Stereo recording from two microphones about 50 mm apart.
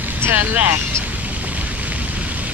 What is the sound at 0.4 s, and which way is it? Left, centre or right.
Speech, right.